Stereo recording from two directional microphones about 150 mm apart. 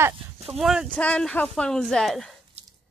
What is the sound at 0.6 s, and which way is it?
Speech, centre (ahead or behind).